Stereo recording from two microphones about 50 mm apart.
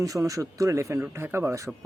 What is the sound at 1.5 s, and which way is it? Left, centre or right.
Speech, right.